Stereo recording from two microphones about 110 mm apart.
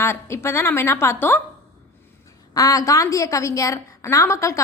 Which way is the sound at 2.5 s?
30° left (ahead or behind).